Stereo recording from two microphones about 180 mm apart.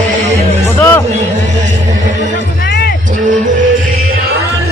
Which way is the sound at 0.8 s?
10° left (ahead or behind).